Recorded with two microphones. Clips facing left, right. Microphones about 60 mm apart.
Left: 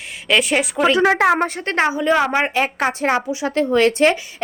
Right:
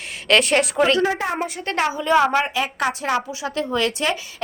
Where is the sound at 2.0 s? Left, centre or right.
Centre.